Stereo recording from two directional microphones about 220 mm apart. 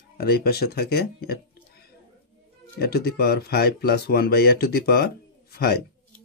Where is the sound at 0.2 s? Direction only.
45° left (ahead or behind).